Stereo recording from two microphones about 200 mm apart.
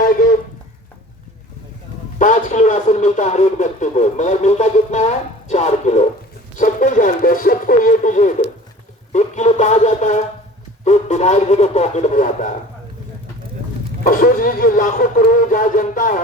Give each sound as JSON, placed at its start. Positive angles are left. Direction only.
{"t": 0.0, "sound": "a sound", "side_deg": 45}
{"t": 2.1, "sound": "a man's voice", "side_deg": 40}
{"t": 14.0, "sound": "speech", "side_deg": 45}